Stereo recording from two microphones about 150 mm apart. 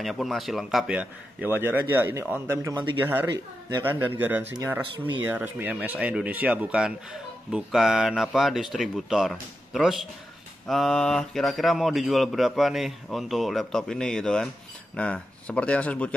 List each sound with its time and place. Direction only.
0.0 s a man's voice: centre (ahead or behind)
4.9 s speech: 30° right (ahead or behind)
5.2 s a man's voice: 15° right (ahead or behind); by 16.2 s 10° left (ahead or behind)